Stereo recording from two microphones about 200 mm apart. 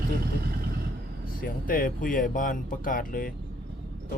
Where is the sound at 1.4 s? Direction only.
45° left (ahead or behind).